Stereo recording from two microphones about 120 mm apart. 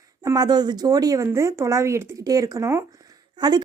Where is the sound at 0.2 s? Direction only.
35° right (ahead or behind).